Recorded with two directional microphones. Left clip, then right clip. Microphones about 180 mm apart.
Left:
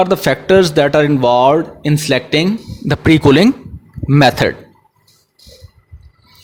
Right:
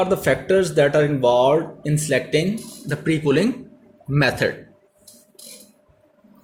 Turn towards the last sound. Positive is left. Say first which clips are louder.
# left 9 dB
turn(degrees=45)  # may be behind; listen again after turning